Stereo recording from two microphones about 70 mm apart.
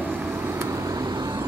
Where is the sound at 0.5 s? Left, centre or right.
Right.